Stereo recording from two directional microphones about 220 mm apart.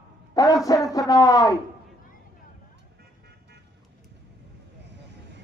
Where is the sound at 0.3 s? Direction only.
15° left (ahead or behind).